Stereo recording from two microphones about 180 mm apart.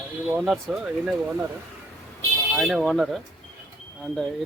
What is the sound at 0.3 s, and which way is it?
Speech, 10° right (ahead or behind).